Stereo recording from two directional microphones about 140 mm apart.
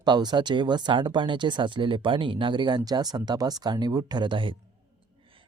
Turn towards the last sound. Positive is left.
turn(degrees=-35)  # may be behind; listen again after turning